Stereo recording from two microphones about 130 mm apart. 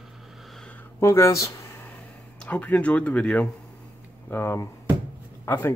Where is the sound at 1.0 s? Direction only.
20° left (ahead or behind).